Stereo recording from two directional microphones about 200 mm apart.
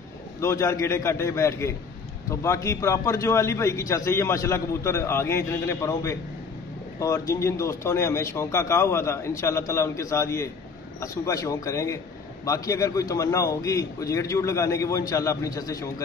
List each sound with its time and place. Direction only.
0.4 s a man's voice: 15° left (ahead or behind)